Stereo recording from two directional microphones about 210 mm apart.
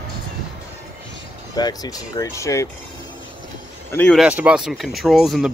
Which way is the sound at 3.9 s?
5° left (ahead or behind).